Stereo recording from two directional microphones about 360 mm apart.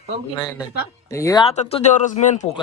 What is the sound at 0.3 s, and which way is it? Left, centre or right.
Speech, centre.